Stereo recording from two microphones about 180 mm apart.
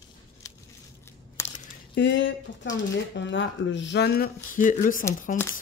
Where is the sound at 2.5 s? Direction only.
90° left.